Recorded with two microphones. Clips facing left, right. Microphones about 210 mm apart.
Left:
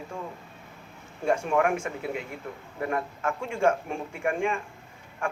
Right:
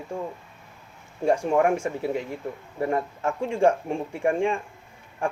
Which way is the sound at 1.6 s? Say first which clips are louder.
Right 4 dB; 35° right (ahead or behind).